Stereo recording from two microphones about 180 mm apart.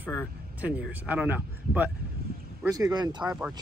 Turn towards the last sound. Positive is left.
turn(degrees=-5)  # may be behind; listen again after turning